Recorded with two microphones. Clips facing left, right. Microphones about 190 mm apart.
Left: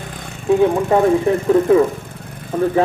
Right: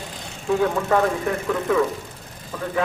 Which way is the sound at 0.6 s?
25° left (ahead or behind).